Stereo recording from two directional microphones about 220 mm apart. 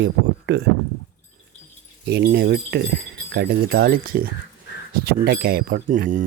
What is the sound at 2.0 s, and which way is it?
Speech, 45° right (ahead or behind).